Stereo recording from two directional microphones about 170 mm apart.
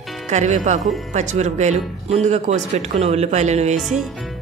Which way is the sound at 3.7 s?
Centre (ahead or behind).